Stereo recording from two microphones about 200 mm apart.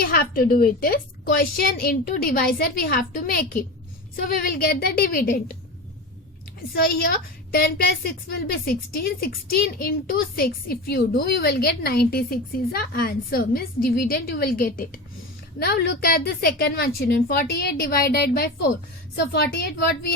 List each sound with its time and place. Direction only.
0.0 s a woman's voice: 45° left (ahead or behind)
6.7 s a woman's voice: 50° left (ahead or behind)